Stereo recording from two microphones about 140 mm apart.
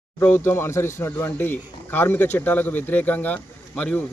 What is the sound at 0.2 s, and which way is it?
Speech, 15° left (ahead or behind).